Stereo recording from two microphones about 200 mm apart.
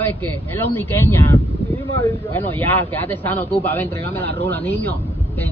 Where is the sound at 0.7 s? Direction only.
10° left (ahead or behind).